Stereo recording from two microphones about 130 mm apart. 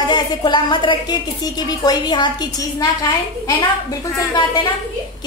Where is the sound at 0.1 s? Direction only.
35° left (ahead or behind).